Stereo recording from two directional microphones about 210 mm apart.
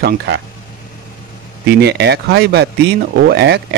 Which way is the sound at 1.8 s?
50° right (ahead or behind).